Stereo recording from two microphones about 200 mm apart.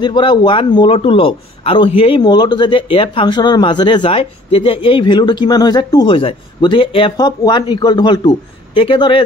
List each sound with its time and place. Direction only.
0.0 s a man's voice: 20° left (ahead or behind)